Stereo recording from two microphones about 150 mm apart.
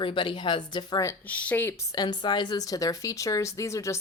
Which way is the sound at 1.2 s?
10° left (ahead or behind).